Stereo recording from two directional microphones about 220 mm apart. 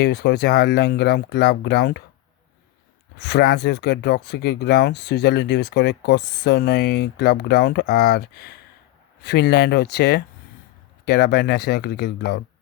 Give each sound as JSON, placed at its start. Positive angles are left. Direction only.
{"t": 0.0, "sound": "speech", "side_deg": 50}
{"t": 3.2, "sound": "speech", "side_deg": 50}